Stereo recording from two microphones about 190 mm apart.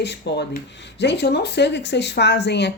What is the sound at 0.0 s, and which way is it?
Speech, 60° left (ahead or behind).